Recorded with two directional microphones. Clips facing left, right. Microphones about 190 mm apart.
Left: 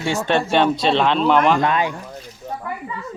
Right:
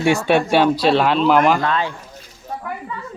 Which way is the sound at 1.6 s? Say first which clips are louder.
Left 2 dB; 15° left (ahead or behind).